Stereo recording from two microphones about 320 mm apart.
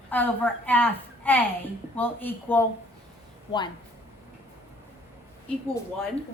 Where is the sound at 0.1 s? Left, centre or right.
Centre.